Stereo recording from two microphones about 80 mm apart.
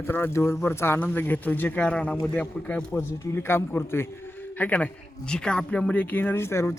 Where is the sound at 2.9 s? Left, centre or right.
Left.